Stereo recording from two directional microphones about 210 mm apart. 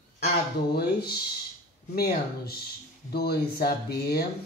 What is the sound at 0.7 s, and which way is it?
Speech, 50° left (ahead or behind).